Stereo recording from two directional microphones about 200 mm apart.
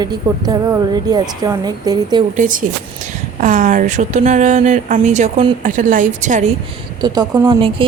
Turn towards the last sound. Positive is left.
turn(degrees=-25)  # may be behind; listen again after turning